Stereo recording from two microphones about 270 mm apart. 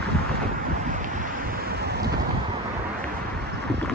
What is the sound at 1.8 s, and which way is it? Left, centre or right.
Wind, right.